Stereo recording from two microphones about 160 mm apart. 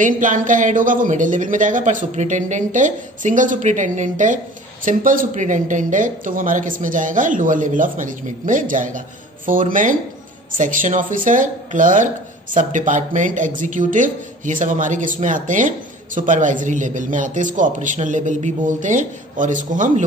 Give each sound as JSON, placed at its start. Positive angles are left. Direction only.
{"t": 0.0, "sound": "a man's voice", "side_deg": -55}